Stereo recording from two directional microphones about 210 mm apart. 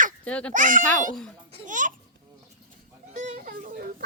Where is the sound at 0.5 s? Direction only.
40° right (ahead or behind).